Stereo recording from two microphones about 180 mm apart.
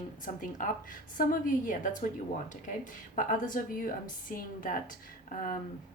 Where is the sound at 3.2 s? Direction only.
50° left (ahead or behind).